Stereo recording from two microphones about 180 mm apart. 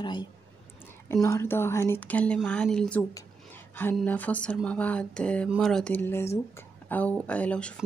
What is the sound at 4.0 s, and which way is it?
Speech, 10° left (ahead or behind).